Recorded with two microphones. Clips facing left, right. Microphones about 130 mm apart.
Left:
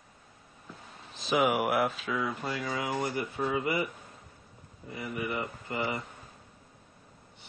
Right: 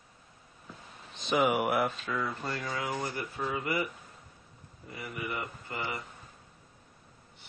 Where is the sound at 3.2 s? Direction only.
20° left (ahead or behind).